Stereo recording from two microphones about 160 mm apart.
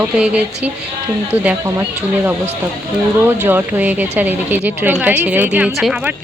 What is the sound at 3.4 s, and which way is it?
A woman's voice, 10° right (ahead or behind).